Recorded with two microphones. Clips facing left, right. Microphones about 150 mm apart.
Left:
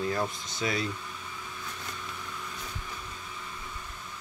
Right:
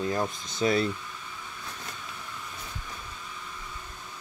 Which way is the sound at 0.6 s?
35° right (ahead or behind).